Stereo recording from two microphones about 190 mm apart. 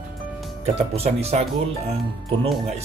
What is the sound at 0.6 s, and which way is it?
Speech, 35° right (ahead or behind).